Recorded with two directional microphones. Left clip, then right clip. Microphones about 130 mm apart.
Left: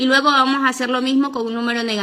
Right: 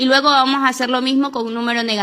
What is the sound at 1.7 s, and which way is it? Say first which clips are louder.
Speech: right 4 dB; 30° right (ahead or behind).